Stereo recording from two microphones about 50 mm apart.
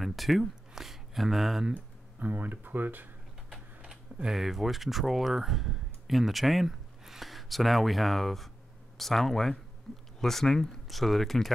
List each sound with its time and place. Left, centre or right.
0.0 s speech: centre
1.7 s speech: right
3.8 s speech: centre